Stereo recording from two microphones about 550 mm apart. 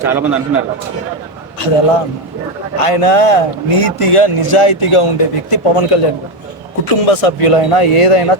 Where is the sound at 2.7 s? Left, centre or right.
Left.